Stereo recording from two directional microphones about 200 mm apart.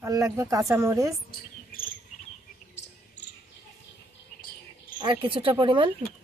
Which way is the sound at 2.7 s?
60° left (ahead or behind).